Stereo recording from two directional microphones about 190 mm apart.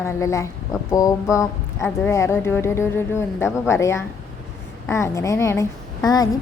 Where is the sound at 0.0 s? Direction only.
15° left (ahead or behind).